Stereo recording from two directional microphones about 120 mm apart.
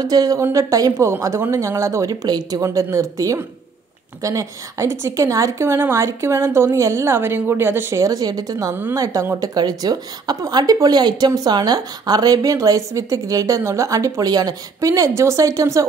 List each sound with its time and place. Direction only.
0.0 s a woman's voice: 30° right (ahead or behind)